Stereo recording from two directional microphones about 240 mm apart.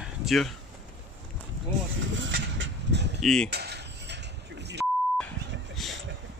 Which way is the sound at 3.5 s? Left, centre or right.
Right.